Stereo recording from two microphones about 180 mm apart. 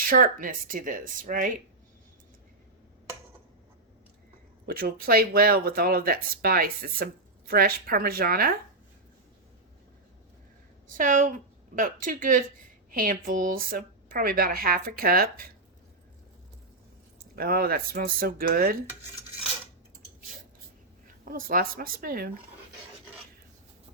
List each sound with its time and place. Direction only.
0.1 s speech: 50° right (ahead or behind)
4.6 s speech: 55° right (ahead or behind)
10.9 s speech: 45° right (ahead or behind)
17.3 s speech: 55° right (ahead or behind)
21.2 s speech: 50° right (ahead or behind)